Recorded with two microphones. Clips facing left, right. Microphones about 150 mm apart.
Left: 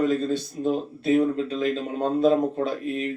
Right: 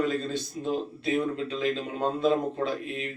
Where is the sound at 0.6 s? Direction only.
40° left (ahead or behind).